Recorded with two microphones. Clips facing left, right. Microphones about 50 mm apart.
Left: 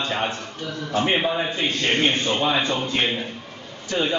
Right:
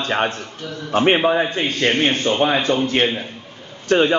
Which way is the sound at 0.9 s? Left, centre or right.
Right.